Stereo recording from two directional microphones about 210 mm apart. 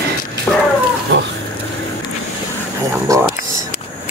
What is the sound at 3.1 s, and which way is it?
Speech, 15° right (ahead or behind).